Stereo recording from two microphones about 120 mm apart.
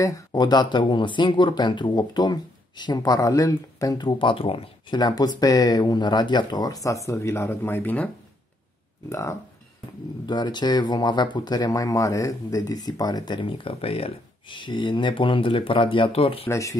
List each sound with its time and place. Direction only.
0.0 s speech: 35° left (ahead or behind); by 4.6 s 50° left (ahead or behind)
4.9 s speech: 35° left (ahead or behind); by 8.1 s 15° left (ahead or behind)
9.1 s speech: 25° left (ahead or behind)
10.2 s speech: 35° left (ahead or behind)
16.4 s speech: 25° left (ahead or behind)